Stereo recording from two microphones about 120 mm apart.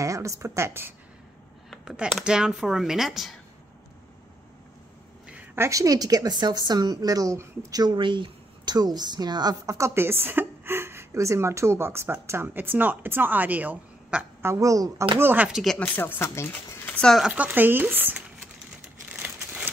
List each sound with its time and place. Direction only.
0.0 s a woman's voice: 25° right (ahead or behind)
1.7 s speech: 5° right (ahead or behind)
5.3 s a woman's voice: 20° right (ahead or behind)
15.1 s speech: 15° right (ahead or behind)
15.8 s speech: 15° left (ahead or behind)
16.9 s speech: 5° left (ahead or behind)
17.3 s speech: 15° right (ahead or behind)
19.1 s crumpling: 15° right (ahead or behind)